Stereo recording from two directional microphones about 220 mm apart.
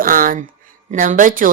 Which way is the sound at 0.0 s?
40° right (ahead or behind).